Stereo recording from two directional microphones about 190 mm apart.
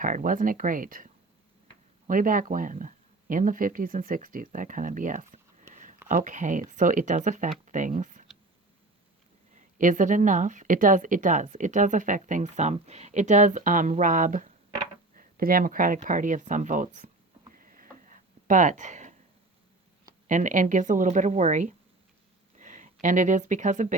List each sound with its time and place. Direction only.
0.0 s speech: 45° right (ahead or behind)
9.6 s speech: 45° right (ahead or behind)
17.5 s a sound: 45° right (ahead or behind)
20.2 s speech: 40° right (ahead or behind)